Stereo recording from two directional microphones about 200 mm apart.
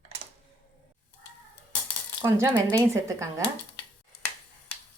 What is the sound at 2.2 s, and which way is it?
Speech, 15° right (ahead or behind).